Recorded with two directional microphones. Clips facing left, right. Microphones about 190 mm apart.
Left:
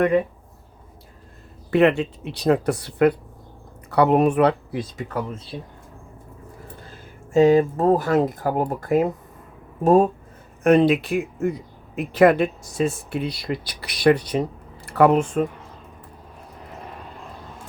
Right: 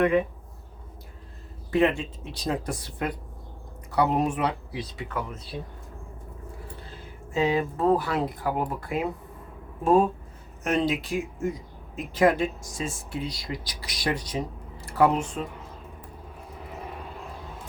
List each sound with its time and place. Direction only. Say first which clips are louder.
1.7 s speech: left 6 dB; 70° left (ahead or behind); by 5.4 s 35° left (ahead or behind)
7.3 s speech: left 9 dB; 45° left (ahead or behind)
10.6 s speech: left 10 dB; 60° left (ahead or behind)